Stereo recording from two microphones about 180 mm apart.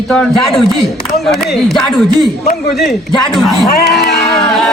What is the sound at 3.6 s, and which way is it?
Speech, 60° left (ahead or behind).